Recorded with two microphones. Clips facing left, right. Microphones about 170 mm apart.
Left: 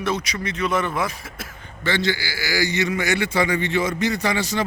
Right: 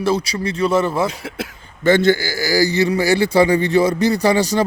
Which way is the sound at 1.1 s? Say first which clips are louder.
Right 8 dB; 65° right (ahead or behind).